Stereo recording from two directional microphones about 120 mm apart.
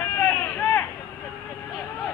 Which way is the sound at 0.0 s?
15° left (ahead or behind).